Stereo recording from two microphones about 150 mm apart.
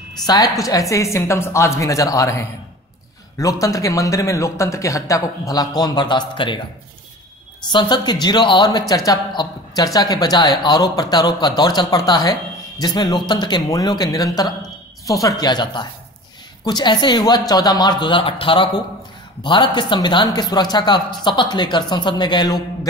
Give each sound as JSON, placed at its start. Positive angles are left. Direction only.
{"t": 0.2, "sound": "speech", "side_deg": 25}
{"t": 7.7, "sound": "speech", "side_deg": 30}